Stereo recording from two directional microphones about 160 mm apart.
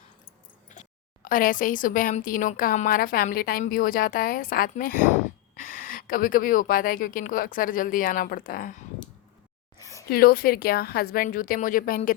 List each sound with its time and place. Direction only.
0.7 s a woman's voice: 55° left (ahead or behind)
10.1 s a woman's voice: 70° left (ahead or behind)